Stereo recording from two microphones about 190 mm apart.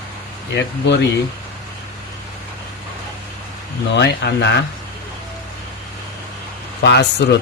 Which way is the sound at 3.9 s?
65° left (ahead or behind).